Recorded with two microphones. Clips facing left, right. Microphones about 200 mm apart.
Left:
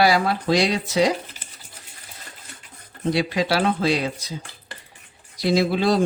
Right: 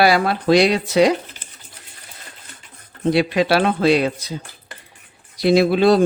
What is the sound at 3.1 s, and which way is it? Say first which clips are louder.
Speech: right 5 dB; 65° right (ahead or behind).